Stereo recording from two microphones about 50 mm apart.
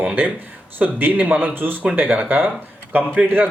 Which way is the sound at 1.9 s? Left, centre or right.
Right.